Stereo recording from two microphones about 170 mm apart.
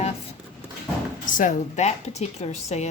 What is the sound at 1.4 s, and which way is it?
A woman's voice, 45° left (ahead or behind).